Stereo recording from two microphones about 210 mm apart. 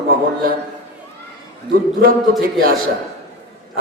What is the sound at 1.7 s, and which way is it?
A man's voice, 45° right (ahead or behind).